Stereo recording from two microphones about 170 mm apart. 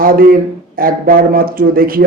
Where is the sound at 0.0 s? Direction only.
55° right (ahead or behind).